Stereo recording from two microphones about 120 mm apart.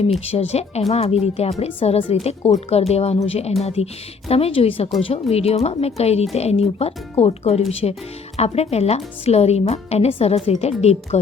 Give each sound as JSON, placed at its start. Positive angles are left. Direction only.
{"t": 0.3, "sound": "a woman's voice", "side_deg": 60}